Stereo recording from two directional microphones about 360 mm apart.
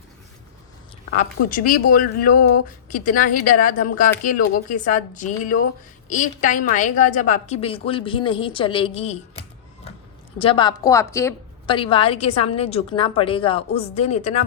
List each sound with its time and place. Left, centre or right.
1.2 s a woman's voice: left
10.3 s a woman's voice: centre